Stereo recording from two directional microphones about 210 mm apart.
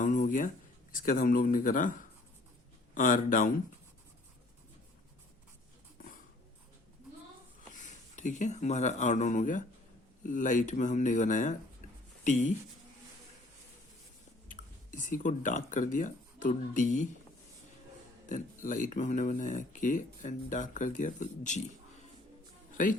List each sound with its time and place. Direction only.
0.0 s a sound: 35° left (ahead or behind)
0.9 s speech: 40° left (ahead or behind)
7.7 s speech: 35° left (ahead or behind)
14.5 s speech: 40° left (ahead or behind)
18.3 s speech: 40° left (ahead or behind)